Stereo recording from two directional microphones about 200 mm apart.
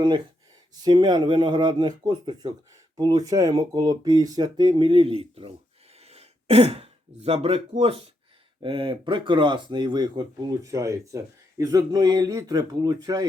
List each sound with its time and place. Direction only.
0.8 s speech: 20° right (ahead or behind)